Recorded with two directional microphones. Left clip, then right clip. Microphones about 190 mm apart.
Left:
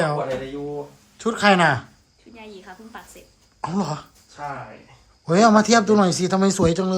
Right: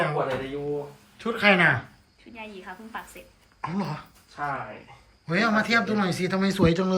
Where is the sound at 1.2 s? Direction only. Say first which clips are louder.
Left 3 dB; 10° left (ahead or behind).